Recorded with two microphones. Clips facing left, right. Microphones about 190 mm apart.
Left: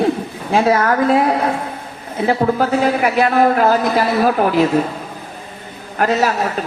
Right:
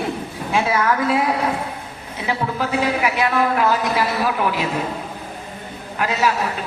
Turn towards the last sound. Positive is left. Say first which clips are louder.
# left 4 dB
turn(degrees=45)  # may be behind; listen again after turning